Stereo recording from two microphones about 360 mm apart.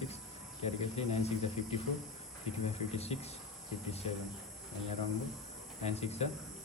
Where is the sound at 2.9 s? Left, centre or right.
Centre.